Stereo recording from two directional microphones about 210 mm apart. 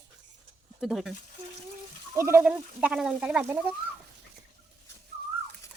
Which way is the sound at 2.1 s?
10° right (ahead or behind).